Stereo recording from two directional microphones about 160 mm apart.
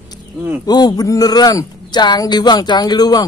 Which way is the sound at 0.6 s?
25° left (ahead or behind).